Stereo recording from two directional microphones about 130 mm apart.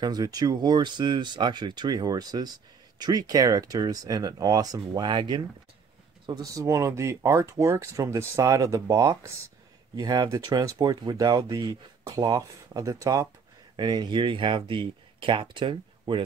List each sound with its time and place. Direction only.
0.0 s speech: 30° right (ahead or behind)